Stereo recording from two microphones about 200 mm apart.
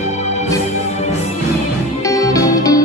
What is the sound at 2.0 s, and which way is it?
Music, 15° left (ahead or behind).